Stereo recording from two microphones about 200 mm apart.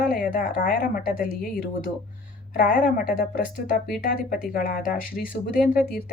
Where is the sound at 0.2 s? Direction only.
45° left (ahead or behind).